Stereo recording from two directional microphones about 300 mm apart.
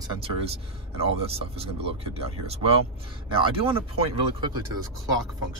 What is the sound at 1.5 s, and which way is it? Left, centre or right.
Speech, centre.